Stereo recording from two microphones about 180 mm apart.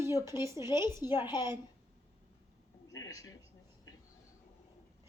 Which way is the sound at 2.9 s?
20° left (ahead or behind).